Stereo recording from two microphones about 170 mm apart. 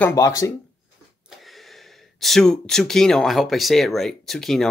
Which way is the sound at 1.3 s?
Centre (ahead or behind).